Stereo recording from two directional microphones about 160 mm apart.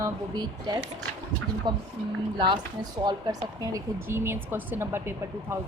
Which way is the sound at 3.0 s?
25° right (ahead or behind).